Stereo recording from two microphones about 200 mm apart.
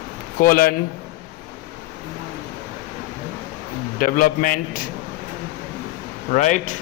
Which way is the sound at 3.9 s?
45° left (ahead or behind).